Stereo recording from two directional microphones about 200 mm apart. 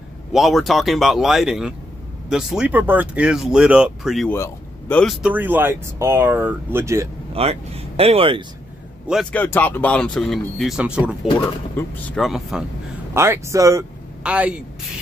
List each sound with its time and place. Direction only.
0.3 s speech: centre (ahead or behind)
4.3 s speech: 10° left (ahead or behind); by 7.1 s 15° right (ahead or behind)
7.3 s speech: 30° right (ahead or behind)
9.0 s speech: centre (ahead or behind)
11.8 s speech: 10° left (ahead or behind)
12.2 s speech: centre (ahead or behind)
13.1 s speech: 15° right (ahead or behind)